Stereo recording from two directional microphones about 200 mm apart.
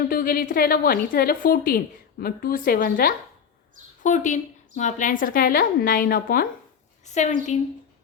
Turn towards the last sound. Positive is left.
turn(degrees=35)  # may be behind; listen again after turning